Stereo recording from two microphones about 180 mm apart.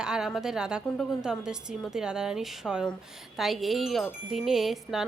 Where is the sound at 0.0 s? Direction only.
5° right (ahead or behind).